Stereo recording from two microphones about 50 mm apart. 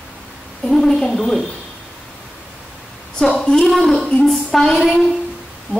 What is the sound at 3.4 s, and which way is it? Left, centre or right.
Speech, centre.